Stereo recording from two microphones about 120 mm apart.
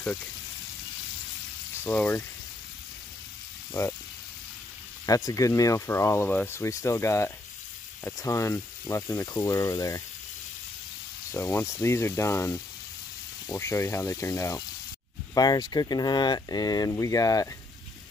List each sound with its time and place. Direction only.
1.8 s speech: 10° left (ahead or behind)
5.0 s speech: 30° left (ahead or behind)
11.5 s speech: 20° left (ahead or behind)